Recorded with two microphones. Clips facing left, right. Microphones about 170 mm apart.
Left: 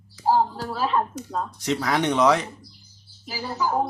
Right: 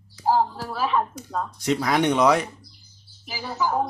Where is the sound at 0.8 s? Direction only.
10° right (ahead or behind).